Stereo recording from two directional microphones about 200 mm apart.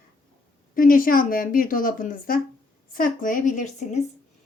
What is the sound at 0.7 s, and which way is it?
A woman's voice, 45° left (ahead or behind).